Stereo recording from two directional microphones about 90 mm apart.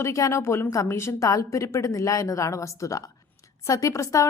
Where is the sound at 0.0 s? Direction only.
35° left (ahead or behind).